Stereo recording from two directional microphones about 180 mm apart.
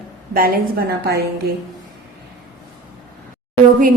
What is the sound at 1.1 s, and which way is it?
Speech, 60° right (ahead or behind).